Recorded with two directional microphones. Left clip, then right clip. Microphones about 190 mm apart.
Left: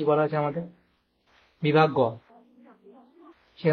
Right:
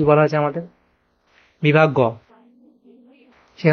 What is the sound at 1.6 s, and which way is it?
Speech, 25° right (ahead or behind).